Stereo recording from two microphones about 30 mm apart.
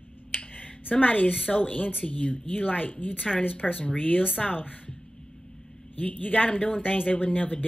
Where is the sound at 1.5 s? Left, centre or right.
Left.